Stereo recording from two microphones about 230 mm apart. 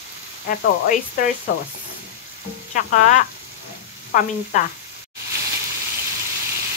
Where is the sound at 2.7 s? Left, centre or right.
Left.